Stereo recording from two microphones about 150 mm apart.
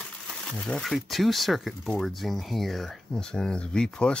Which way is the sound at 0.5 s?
5° left (ahead or behind).